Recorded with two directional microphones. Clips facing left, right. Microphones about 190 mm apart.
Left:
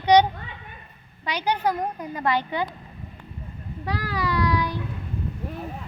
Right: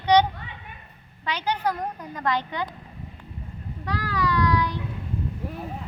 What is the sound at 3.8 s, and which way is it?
Speech, 10° left (ahead or behind).